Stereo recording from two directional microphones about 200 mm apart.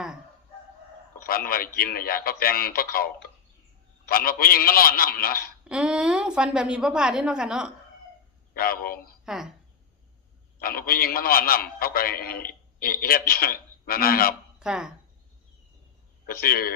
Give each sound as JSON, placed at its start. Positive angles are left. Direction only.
{"t": 1.3, "sound": "a man's voice", "side_deg": 50}
{"t": 5.6, "sound": "a woman's voice", "side_deg": -5}
{"t": 8.5, "sound": "a man's voice", "side_deg": 50}
{"t": 9.2, "sound": "speech", "side_deg": -5}
{"t": 10.6, "sound": "a man's voice", "side_deg": 45}
{"t": 14.6, "sound": "speech", "side_deg": -5}
{"t": 16.2, "sound": "a man's voice", "side_deg": 50}